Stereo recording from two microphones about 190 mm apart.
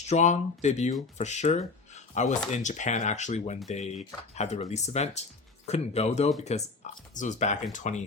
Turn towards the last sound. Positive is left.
turn(degrees=40)  # may be behind; listen again after turning